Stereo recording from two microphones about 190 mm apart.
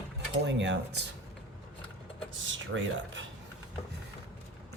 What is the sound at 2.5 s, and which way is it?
Speech, 80° right.